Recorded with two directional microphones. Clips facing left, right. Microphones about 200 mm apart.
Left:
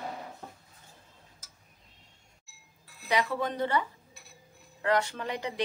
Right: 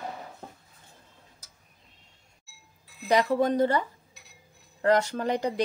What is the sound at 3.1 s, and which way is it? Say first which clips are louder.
Speech: right 7 dB; 40° right (ahead or behind).